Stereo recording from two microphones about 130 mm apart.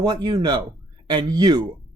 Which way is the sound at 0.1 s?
35° right (ahead or behind).